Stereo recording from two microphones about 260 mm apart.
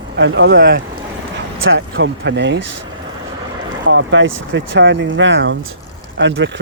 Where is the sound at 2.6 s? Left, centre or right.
Right.